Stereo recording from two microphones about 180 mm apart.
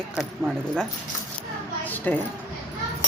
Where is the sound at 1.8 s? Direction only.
10° left (ahead or behind).